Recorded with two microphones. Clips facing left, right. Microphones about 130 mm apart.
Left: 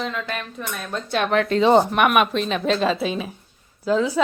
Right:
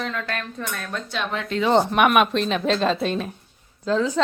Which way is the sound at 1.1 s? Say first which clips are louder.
Left 9 dB; 60° left (ahead or behind).